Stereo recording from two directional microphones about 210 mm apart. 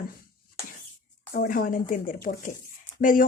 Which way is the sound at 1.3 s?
45° left (ahead or behind).